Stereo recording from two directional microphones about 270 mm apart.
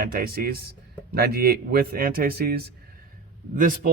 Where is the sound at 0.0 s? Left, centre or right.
Right.